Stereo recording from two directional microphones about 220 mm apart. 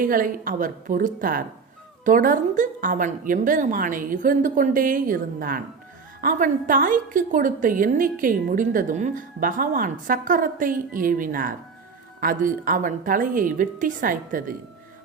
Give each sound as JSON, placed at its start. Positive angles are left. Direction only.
{"t": 0.0, "sound": "a woman's voice", "side_deg": -40}